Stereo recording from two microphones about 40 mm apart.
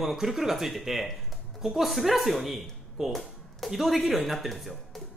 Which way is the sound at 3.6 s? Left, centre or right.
Centre.